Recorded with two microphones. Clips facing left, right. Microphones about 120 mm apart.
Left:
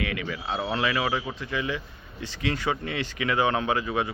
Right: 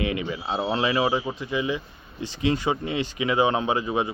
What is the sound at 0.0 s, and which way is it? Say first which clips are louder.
Speech: right 4 dB; 25° right (ahead or behind).